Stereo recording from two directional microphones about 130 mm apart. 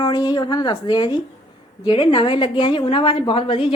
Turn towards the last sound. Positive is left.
turn(degrees=45)  # may be behind; listen again after turning